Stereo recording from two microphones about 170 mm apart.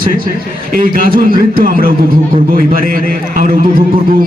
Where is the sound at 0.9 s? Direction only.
60° right (ahead or behind).